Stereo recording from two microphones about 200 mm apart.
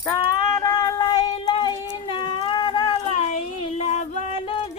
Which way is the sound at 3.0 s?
35° left (ahead or behind).